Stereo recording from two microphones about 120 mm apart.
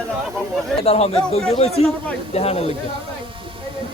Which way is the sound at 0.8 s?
55° left (ahead or behind).